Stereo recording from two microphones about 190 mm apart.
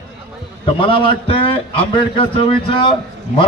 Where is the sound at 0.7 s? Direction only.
25° left (ahead or behind).